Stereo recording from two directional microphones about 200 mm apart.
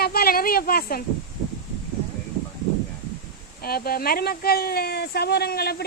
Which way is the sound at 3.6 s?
50° left (ahead or behind).